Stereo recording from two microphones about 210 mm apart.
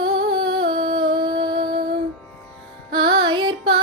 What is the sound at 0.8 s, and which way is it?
Music, 25° right (ahead or behind).